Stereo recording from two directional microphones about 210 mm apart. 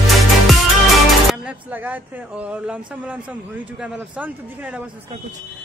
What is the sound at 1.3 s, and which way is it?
Speech, 5° right (ahead or behind).